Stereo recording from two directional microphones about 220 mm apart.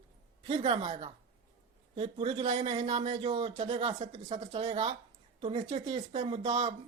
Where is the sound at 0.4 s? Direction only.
25° right (ahead or behind).